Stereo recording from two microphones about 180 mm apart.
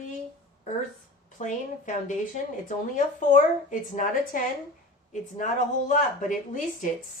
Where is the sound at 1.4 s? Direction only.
45° left (ahead or behind).